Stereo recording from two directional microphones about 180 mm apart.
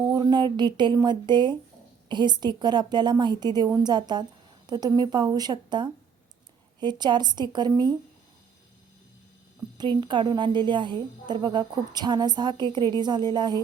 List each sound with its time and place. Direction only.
0.0 s a woman's voice: 20° right (ahead or behind)
9.7 s a woman's voice: 25° right (ahead or behind)